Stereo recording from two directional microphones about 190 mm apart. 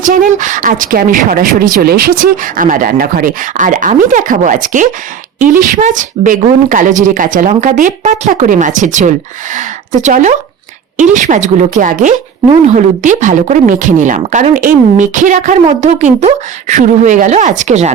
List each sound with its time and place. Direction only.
0.0 s a woman's voice: 45° right (ahead or behind)